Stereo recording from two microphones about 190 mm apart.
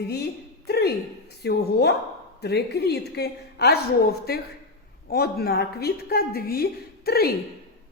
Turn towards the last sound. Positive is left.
turn(degrees=55)  # may be behind; listen again after turning